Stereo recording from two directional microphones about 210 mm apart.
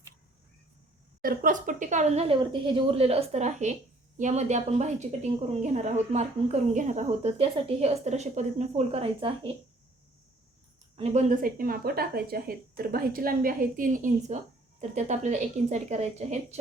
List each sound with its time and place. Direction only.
1.2 s speech: 40° right (ahead or behind)
10.9 s speech: 30° right (ahead or behind)